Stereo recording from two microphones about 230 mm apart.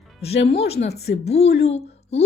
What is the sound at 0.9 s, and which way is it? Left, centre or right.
Speech, left.